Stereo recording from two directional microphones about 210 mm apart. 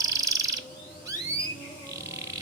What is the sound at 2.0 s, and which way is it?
Frog, 15° right (ahead or behind).